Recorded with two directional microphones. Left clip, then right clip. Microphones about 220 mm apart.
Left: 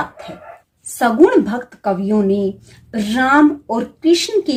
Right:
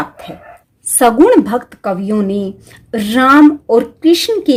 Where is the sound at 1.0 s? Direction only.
55° right (ahead or behind).